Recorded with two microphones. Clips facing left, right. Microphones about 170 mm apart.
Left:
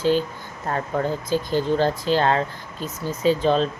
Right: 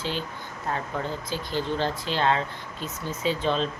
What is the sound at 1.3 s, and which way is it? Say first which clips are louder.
Speech: left 7 dB; 45° left (ahead or behind).